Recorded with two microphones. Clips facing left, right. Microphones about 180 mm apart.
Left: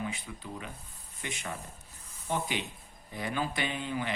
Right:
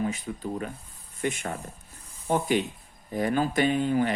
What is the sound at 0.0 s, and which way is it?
Speech, 45° right (ahead or behind).